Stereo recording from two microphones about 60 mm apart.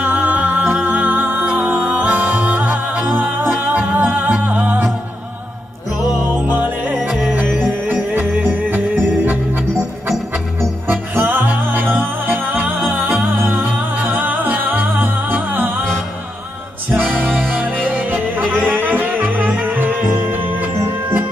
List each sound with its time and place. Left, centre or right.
0.0 s music: right
6.4 s music: right
7.0 s music: centre
7.4 s music: centre
7.9 s music: right
11.1 s music: right
16.9 s music: right